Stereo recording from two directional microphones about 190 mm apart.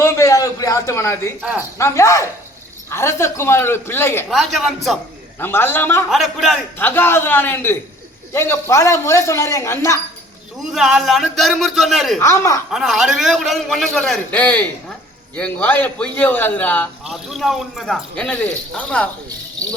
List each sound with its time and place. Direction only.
0.0 s a sound: 15° left (ahead or behind)
1.8 s speech: 15° left (ahead or behind)
4.3 s a man's voice: centre (ahead or behind)
5.4 s speech: 10° left (ahead or behind)
6.1 s a man's voice: centre (ahead or behind)
6.7 s speech: 10° left (ahead or behind)
10.7 s a man's voice: centre (ahead or behind)
12.2 s speech: 15° left (ahead or behind)
12.7 s a man's voice: centre (ahead or behind)